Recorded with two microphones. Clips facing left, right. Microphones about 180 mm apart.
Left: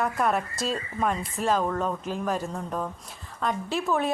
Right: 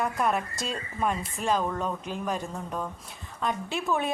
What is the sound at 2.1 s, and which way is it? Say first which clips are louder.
Speech: left 3 dB; 40° left (ahead or behind).